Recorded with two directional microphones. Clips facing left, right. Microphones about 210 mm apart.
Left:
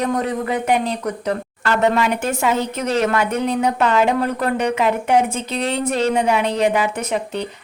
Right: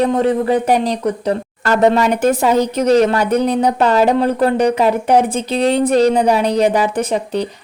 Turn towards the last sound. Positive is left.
turn(degrees=-35)  # may be behind; listen again after turning